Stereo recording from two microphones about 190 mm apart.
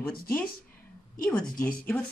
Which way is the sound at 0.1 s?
50° left (ahead or behind).